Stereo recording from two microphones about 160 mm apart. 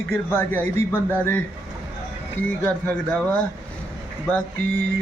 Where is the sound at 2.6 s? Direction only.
10° left (ahead or behind).